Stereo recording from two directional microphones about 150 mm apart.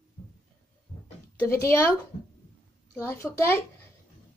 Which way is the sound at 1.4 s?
20° left (ahead or behind).